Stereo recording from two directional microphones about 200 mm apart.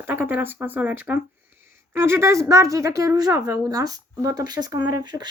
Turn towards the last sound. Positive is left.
turn(degrees=-20)  # may be behind; listen again after turning